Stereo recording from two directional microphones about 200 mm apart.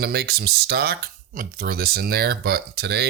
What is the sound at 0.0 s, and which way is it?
Speech, 50° right (ahead or behind).